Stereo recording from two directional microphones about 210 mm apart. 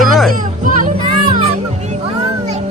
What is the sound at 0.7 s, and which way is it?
Music, 40° right (ahead or behind).